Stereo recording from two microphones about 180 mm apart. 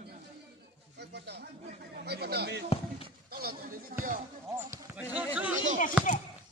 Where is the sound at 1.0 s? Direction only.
70° right (ahead or behind).